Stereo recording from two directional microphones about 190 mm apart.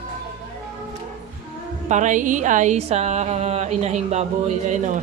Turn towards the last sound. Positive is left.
turn(degrees=-40)  # may be behind; listen again after turning